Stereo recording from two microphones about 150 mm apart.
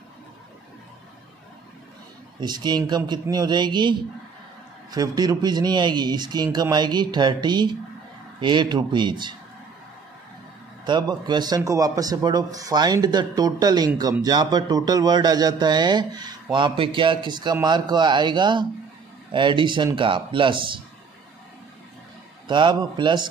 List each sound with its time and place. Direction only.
2.4 s speech: 30° right (ahead or behind)
2.8 s a man's voice: 20° right (ahead or behind)
10.9 s a man's voice: 30° right (ahead or behind)
22.5 s a man's voice: 30° right (ahead or behind)